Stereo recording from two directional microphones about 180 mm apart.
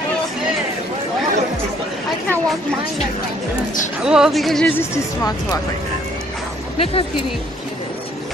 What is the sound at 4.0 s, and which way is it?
Speech, 5° right (ahead or behind).